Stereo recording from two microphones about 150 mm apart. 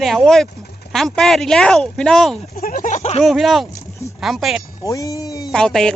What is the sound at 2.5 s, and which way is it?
Speech, 75° left (ahead or behind).